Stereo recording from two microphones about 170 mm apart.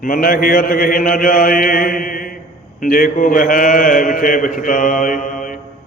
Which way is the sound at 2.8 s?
55° left (ahead or behind).